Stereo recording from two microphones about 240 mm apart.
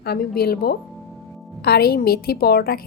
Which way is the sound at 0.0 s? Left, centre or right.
Left.